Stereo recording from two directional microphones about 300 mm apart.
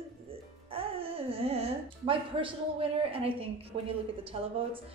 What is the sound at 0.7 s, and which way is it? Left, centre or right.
A woman's voice, centre.